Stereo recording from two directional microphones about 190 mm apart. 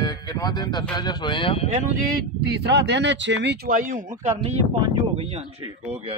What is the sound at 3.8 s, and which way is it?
Speech, 45° right (ahead or behind).